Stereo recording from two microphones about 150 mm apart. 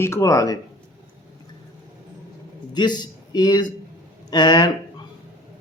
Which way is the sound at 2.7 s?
30° left (ahead or behind).